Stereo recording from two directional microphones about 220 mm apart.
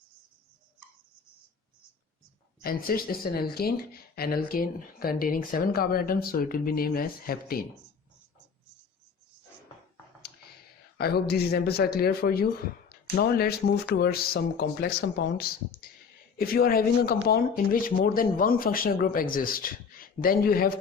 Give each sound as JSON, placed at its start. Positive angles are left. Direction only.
{"t": 2.6, "sound": "speech", "side_deg": 40}
{"t": 10.9, "sound": "speech", "side_deg": 45}